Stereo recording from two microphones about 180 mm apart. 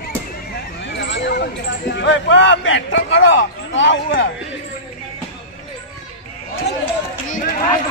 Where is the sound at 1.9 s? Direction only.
75° left (ahead or behind).